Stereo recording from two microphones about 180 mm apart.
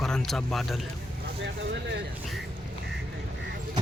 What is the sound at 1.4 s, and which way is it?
Vehicle, 75° right (ahead or behind).